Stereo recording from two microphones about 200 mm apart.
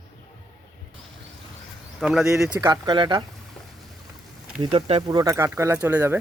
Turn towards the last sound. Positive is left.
turn(degrees=-10)  # may be behind; listen again after turning